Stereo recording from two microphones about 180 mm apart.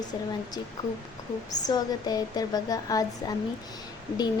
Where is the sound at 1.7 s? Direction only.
20° left (ahead or behind).